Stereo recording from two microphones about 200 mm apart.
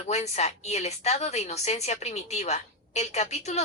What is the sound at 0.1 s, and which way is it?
A woman's voice, 35° left (ahead or behind).